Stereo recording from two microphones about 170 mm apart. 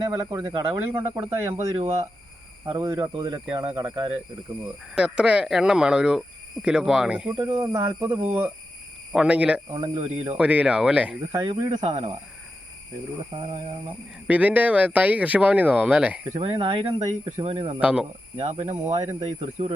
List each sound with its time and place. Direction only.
0.1 s speech: 20° right (ahead or behind)
1.7 s speech: 40° right (ahead or behind)
2.6 s speech: 20° right (ahead or behind)
4.9 s speech: 5° right (ahead or behind)
7.4 s speech: 20° right (ahead or behind)
7.9 s speech: 10° right (ahead or behind)
9.6 s speech: 25° right (ahead or behind)
9.9 s speech: 35° right (ahead or behind)
10.3 s speech: 10° right (ahead or behind)
11.3 s speech: 25° right (ahead or behind)
14.3 s speech: 10° right (ahead or behind)
16.3 s speech: 30° right (ahead or behind)
17.7 s speech: 5° right (ahead or behind)
18.3 s speech: 35° right (ahead or behind)